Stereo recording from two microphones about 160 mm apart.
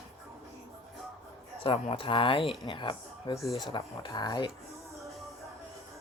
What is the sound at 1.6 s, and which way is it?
Speech, 35° left (ahead or behind).